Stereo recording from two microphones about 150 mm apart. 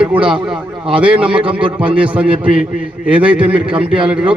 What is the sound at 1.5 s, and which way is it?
Speech, 35° right (ahead or behind).